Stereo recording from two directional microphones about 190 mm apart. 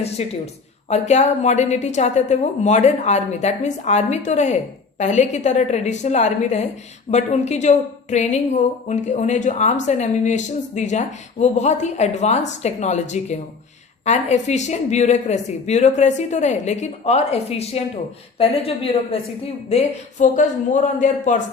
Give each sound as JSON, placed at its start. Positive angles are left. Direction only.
{"t": 0.2, "sound": "a woman's voice", "side_deg": 35}
{"t": 19.7, "sound": "a woman's voice", "side_deg": 40}